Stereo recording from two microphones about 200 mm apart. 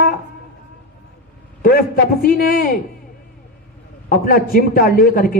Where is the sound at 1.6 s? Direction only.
50° left (ahead or behind).